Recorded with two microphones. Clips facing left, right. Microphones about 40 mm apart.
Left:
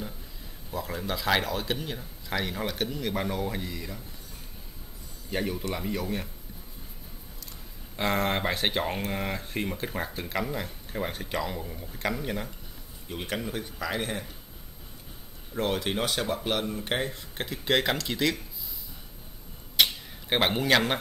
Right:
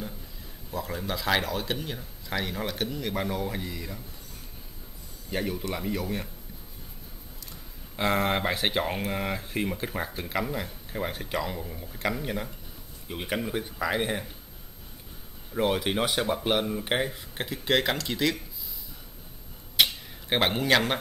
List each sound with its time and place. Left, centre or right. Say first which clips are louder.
0.7 s speech: even; centre
5.3 s speech: even; centre
7.9 s speech: right 1 dB; centre
13.1 s speech: right 2 dB; centre
15.5 s speech: right 2 dB; centre
19.8 s a sound: even; centre